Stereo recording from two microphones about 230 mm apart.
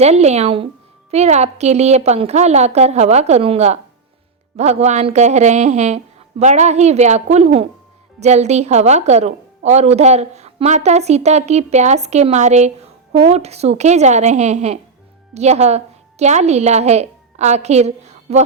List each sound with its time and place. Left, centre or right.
0.0 s a woman's voice: right